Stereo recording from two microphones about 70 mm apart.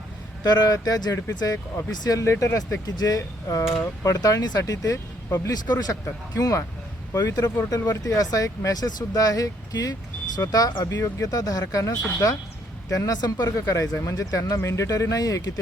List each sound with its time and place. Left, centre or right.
0.4 s speech: left
2.0 s speech: left
2.8 s speech: left
5.5 s speech: left
7.8 s speech: left
10.8 s speech: left
13.2 s speech: left
13.6 s speech: left